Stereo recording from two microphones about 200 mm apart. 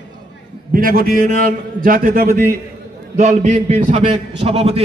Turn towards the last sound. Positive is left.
turn(degrees=-30)  # may be behind; listen again after turning